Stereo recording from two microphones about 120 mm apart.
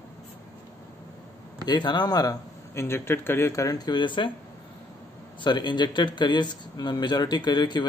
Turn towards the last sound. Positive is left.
turn(degrees=35)  # may be behind; listen again after turning